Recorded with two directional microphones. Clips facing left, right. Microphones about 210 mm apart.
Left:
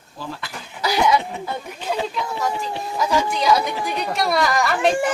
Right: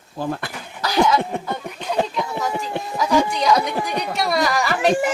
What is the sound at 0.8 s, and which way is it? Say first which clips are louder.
Chuckle: right 1 dB; 10° left (ahead or behind).